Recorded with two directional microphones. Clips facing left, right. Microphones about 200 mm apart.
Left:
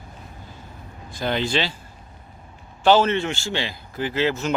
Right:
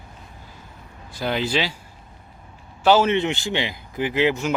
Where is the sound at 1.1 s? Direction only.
5° right (ahead or behind).